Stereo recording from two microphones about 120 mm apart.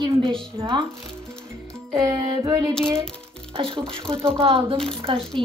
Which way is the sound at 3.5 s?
50° right (ahead or behind).